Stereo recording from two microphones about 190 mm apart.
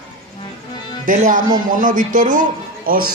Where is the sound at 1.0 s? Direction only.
45° right (ahead or behind).